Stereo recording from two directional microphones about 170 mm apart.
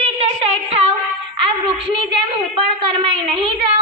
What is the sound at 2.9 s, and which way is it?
Speech, 30° right (ahead or behind).